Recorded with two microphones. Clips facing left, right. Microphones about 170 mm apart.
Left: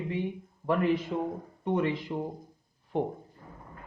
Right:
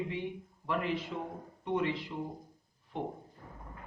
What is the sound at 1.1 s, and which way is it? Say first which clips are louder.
Speech: left 8 dB; 45° left (ahead or behind).